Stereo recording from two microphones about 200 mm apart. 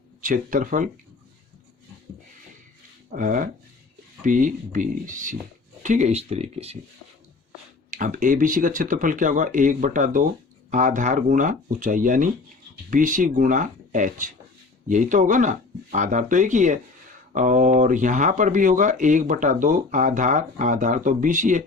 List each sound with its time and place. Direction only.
0.2 s speech: 40° right (ahead or behind)
3.1 s speech: 40° right (ahead or behind)
7.9 s speech: 40° right (ahead or behind)